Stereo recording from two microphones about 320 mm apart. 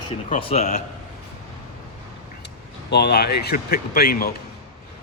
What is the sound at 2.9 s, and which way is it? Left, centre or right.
Speech, left.